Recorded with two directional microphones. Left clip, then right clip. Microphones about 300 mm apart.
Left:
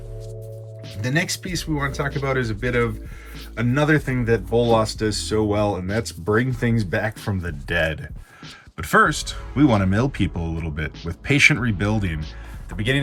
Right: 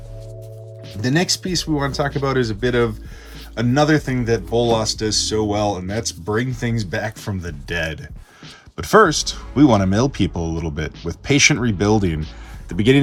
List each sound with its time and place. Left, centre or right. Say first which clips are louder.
1.0 s speech: right 4 dB; centre